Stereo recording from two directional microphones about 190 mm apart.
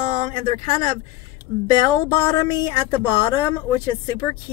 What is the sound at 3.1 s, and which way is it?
Speech, 20° left (ahead or behind).